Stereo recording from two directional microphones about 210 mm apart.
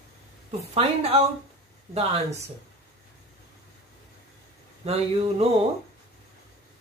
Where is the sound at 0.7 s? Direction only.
30° right (ahead or behind).